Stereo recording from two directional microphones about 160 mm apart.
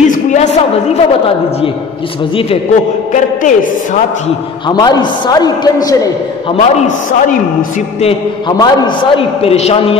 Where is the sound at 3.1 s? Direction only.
50° left (ahead or behind).